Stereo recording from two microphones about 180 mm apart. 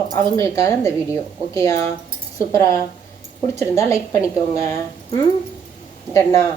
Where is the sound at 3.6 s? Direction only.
15° left (ahead or behind).